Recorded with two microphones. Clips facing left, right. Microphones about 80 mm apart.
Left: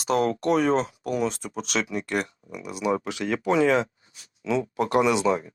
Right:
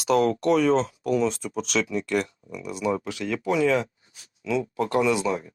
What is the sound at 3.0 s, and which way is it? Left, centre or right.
Speech, left.